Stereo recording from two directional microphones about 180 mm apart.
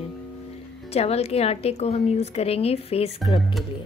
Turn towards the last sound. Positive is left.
turn(degrees=35)  # may be behind; listen again after turning